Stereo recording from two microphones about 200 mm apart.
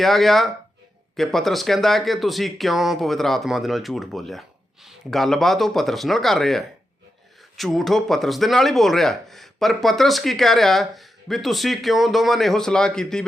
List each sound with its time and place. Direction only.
0.0 s speech: centre (ahead or behind)